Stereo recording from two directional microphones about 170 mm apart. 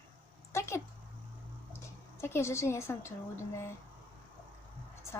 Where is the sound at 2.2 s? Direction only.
15° left (ahead or behind).